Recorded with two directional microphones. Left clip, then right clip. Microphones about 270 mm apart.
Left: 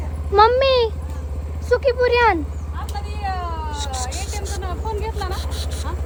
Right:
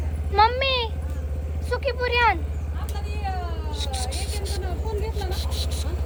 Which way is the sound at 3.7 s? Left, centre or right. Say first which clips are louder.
Left 4 dB; left.